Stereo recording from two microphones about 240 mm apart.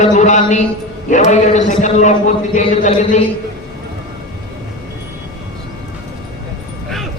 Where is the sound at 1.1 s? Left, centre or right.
Left.